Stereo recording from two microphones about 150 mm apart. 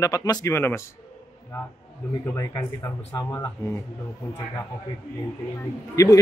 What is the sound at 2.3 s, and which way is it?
A man's voice, 20° left (ahead or behind).